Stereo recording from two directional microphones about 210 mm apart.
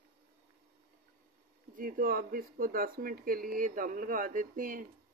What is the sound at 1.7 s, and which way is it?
Speech, 40° right (ahead or behind).